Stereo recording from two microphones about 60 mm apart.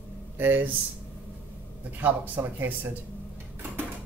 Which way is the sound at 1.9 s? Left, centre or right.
Right.